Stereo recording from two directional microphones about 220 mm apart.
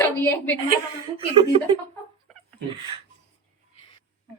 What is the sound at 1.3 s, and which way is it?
Speech, 25° right (ahead or behind).